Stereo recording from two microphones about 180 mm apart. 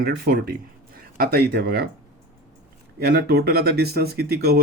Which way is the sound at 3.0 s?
60° right (ahead or behind).